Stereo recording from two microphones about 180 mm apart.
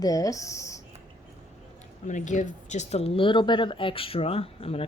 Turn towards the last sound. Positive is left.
turn(degrees=30)  # may be behind; listen again after turning